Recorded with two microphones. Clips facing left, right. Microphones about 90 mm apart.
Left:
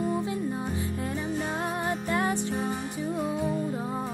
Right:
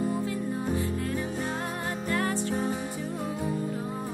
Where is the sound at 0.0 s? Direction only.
20° left (ahead or behind).